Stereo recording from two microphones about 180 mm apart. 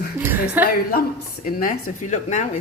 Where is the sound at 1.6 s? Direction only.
45° left (ahead or behind).